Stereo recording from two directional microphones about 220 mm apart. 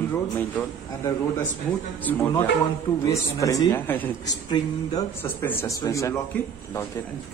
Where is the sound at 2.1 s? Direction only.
10° left (ahead or behind).